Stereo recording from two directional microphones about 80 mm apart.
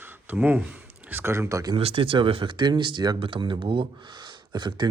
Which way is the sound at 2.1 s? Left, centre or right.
Right.